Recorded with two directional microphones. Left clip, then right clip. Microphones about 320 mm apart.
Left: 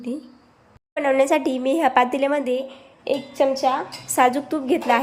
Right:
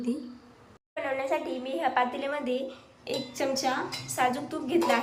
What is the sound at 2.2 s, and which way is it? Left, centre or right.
A woman's voice, centre.